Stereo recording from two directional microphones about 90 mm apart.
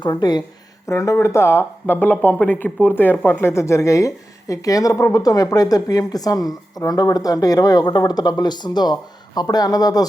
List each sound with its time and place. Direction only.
0.0 s a woman's voice: 50° left (ahead or behind)
0.9 s speech: 35° left (ahead or behind)
3.5 s a woman's voice: 30° left (ahead or behind)